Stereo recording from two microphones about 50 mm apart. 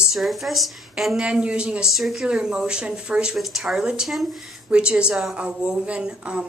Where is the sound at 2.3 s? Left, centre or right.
Centre.